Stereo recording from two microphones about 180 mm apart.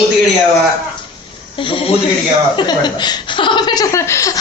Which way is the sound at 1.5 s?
30° left (ahead or behind).